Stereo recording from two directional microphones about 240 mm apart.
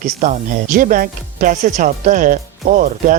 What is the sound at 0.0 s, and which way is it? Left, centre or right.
Speech, right.